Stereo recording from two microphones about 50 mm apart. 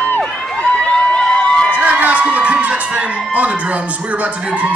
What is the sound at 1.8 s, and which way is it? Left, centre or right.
Music, right.